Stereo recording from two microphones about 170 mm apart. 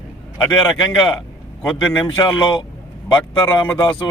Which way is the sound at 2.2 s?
25° left (ahead or behind).